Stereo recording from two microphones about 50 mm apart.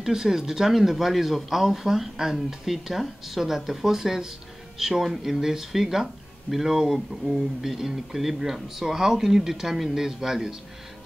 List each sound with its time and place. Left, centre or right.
0.0 s speech: centre